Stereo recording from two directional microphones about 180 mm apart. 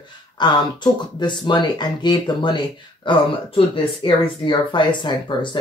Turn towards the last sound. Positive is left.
turn(degrees=25)  # may be behind; listen again after turning